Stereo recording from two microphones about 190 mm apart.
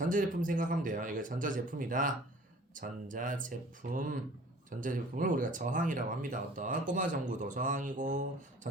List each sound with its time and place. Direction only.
0.0 s speech: 45° right (ahead or behind)